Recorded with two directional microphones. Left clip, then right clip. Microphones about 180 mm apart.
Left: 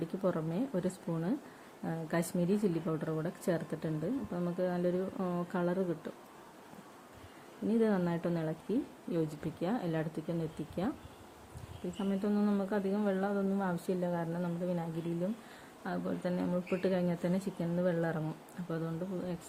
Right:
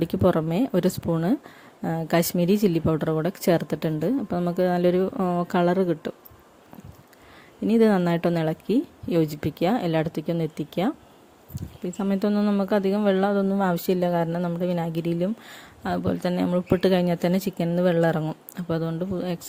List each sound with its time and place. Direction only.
0.0 s speech: 60° right (ahead or behind)
7.7 s speech: 60° right (ahead or behind)
11.9 s speech: 60° right (ahead or behind)